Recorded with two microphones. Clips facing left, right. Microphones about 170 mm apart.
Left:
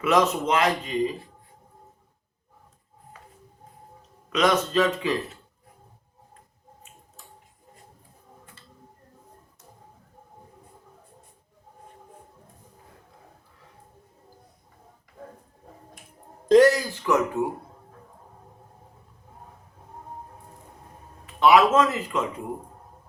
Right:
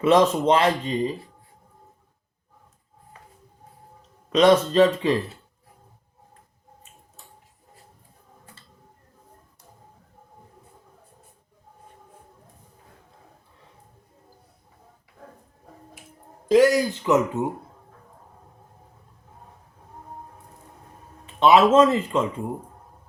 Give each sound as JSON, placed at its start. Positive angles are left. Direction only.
{"t": 0.0, "sound": "speech", "side_deg": -30}
{"t": 4.3, "sound": "speech", "side_deg": -30}
{"t": 16.5, "sound": "speech", "side_deg": -10}
{"t": 21.2, "sound": "speech", "side_deg": -25}